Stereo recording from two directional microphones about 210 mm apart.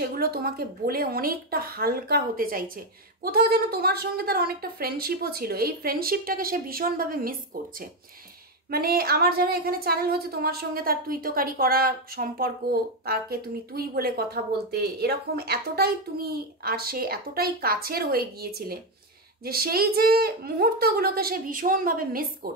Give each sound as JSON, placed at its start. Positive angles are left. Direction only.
{"t": 0.0, "sound": "speech", "side_deg": -45}
{"t": 8.6, "sound": "speech", "side_deg": -45}